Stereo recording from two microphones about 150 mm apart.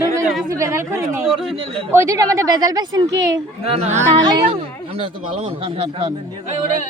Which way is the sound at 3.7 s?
45° right (ahead or behind).